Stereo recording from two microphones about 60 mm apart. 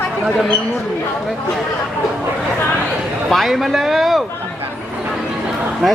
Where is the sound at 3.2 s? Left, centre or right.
Centre.